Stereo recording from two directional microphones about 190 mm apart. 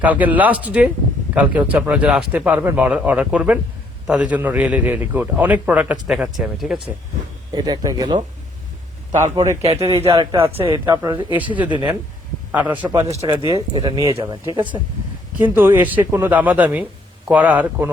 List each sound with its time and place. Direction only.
0.0 s a man's voice: 10° right (ahead or behind)
7.5 s a man's voice: 20° right (ahead or behind)
9.2 s a man's voice: 15° right (ahead or behind)
13.1 s speech: 35° right (ahead or behind)
13.5 s a man's voice: 20° right (ahead or behind)
15.4 s a man's voice: 10° right (ahead or behind)